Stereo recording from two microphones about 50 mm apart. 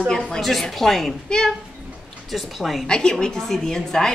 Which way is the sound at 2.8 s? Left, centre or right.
Centre.